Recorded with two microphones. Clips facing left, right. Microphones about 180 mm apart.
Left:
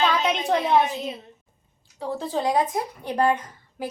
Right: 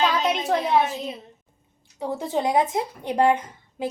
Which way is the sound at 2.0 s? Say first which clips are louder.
Right 1 dB; 20° right (ahead or behind).